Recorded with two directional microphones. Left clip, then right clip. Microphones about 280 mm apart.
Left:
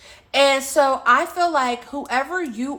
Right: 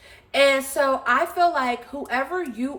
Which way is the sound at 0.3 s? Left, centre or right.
Centre.